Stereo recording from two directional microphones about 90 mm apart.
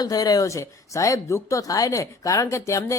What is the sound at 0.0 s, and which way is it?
A man's voice, 45° left (ahead or behind).